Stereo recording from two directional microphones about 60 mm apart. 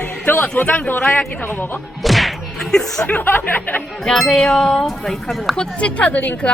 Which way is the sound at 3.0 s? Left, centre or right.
Left.